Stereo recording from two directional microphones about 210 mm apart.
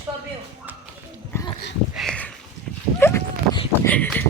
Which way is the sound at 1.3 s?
15° left (ahead or behind).